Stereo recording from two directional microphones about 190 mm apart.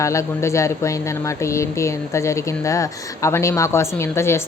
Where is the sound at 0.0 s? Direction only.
15° left (ahead or behind).